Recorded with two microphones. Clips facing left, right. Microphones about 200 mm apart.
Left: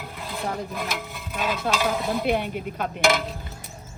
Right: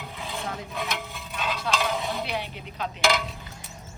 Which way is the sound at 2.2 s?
50° left (ahead or behind).